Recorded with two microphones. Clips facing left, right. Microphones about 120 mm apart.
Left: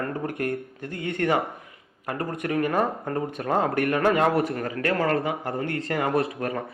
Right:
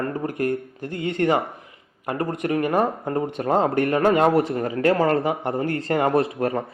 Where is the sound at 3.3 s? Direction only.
30° right (ahead or behind).